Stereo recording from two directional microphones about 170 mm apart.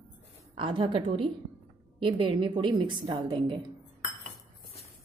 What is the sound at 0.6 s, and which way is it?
A woman's voice, 30° right (ahead or behind).